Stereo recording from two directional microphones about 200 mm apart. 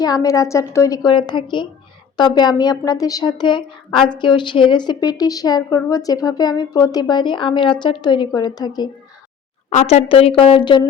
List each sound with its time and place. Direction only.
0.0 s a woman's voice: 20° left (ahead or behind)
9.6 s a woman's voice: 35° left (ahead or behind)